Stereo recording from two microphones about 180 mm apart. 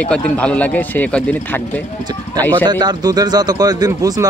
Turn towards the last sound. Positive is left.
turn(degrees=-20)  # may be behind; listen again after turning